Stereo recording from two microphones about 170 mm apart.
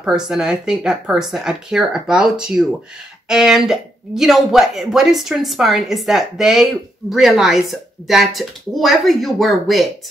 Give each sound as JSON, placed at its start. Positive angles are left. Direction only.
{"t": 0.0, "sound": "speech", "side_deg": -5}